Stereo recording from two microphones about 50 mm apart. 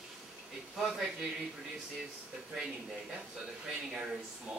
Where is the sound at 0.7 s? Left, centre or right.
Centre.